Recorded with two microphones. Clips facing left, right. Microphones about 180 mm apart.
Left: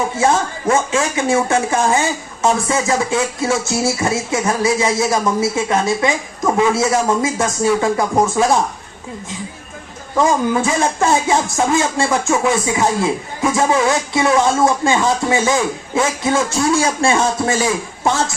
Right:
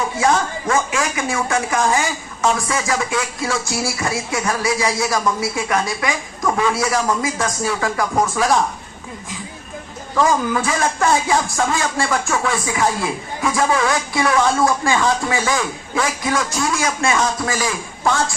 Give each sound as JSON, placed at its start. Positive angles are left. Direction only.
{"t": 0.2, "sound": "speech", "side_deg": 25}
{"t": 10.2, "sound": "speech", "side_deg": 25}